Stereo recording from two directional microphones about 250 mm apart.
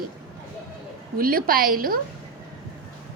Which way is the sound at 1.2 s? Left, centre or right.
Right.